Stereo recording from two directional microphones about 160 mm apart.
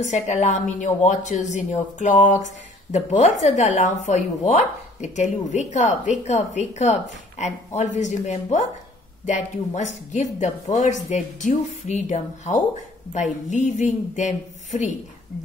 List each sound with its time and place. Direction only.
0.0 s a woman's voice: 45° left (ahead or behind)
9.8 s a woman's voice: 45° left (ahead or behind)